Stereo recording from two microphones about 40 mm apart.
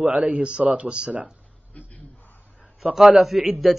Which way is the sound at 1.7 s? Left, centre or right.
Left.